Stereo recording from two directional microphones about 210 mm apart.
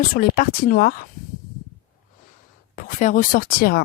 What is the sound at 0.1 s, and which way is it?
Speech, 40° left (ahead or behind).